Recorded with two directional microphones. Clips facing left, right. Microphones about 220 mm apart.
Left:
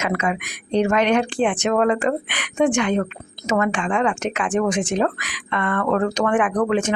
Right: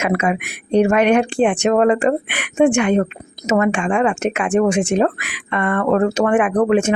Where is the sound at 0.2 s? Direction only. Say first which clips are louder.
Right 4 dB; 10° right (ahead or behind).